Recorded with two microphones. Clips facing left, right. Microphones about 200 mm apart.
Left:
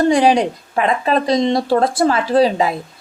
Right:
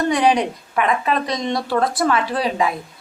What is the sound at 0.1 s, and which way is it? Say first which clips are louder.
A woman's voice: left 4 dB; 30° left (ahead or behind).